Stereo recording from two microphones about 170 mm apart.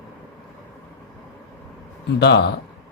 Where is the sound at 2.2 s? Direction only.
80° left.